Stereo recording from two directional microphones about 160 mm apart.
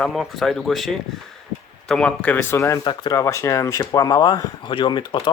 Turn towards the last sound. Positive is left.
turn(degrees=30)  # may be behind; listen again after turning